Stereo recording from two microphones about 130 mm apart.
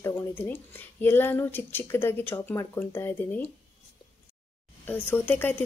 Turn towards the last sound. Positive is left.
turn(degrees=15)  # may be behind; listen again after turning